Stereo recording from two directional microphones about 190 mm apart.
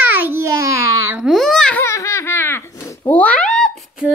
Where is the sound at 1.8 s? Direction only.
15° left (ahead or behind); by 4.1 s centre (ahead or behind).